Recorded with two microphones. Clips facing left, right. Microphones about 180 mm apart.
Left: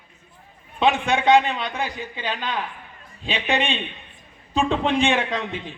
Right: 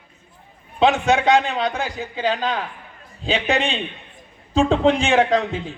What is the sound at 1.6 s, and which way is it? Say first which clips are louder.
Speech: right 4 dB; 40° right (ahead or behind).